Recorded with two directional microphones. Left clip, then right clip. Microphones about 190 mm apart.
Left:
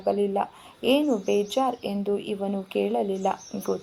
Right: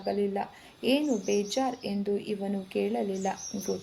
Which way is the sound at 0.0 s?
20° left (ahead or behind).